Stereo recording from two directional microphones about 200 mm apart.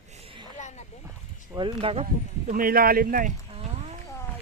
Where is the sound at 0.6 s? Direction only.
35° left (ahead or behind).